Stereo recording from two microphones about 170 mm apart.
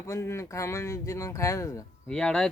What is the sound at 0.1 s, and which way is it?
Speech, 15° left (ahead or behind).